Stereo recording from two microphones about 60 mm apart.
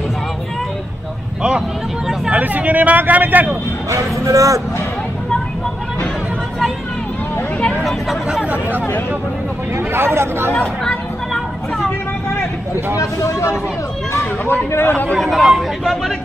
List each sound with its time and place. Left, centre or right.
2.3 s speech: right
3.9 s speech: right
9.9 s speech: right
10.5 s speech: centre
13.0 s speech: left
14.1 s speech: left
15.1 s speech: centre